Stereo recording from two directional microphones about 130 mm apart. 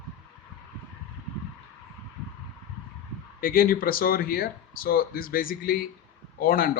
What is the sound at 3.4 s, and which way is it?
Speech, 90° left.